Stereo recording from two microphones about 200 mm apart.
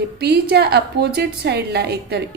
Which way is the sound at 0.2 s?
55° right (ahead or behind).